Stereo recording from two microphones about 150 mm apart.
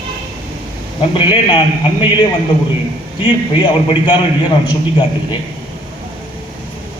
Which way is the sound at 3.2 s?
35° left (ahead or behind).